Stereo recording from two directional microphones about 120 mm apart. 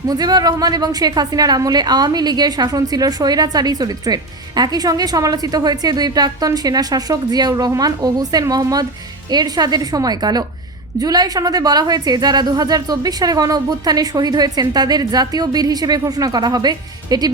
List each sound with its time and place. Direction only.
0.1 s a woman's voice: 35° right (ahead or behind)